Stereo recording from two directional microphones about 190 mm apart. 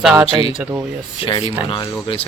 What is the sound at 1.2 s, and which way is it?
Speech, 30° left (ahead or behind).